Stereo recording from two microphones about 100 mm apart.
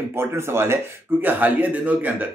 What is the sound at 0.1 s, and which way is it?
Speech, 25° right (ahead or behind).